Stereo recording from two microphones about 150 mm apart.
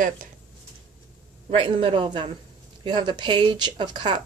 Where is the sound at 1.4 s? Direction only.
35° right (ahead or behind).